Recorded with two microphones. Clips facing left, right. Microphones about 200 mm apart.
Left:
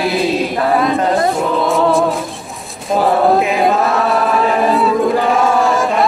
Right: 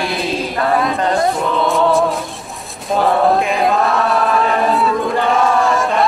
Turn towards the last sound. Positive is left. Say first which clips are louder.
# left 1 dB
turn(degrees=0)  # may be behind; listen again after turning